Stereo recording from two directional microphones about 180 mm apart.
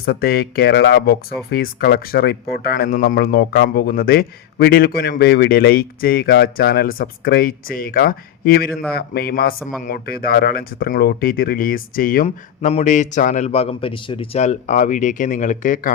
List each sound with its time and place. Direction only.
0.0 s speech: 60° left (ahead or behind)